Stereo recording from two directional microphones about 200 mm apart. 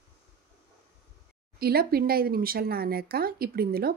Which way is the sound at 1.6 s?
50° right (ahead or behind).